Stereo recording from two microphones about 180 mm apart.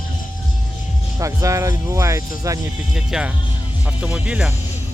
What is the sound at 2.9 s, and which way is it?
Speech, 5° right (ahead or behind).